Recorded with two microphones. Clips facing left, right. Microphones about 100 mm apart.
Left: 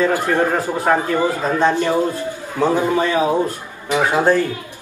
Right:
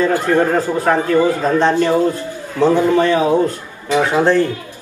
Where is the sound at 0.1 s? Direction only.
15° left (ahead or behind).